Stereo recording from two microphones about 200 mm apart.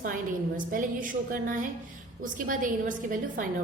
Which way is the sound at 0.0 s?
45° right (ahead or behind).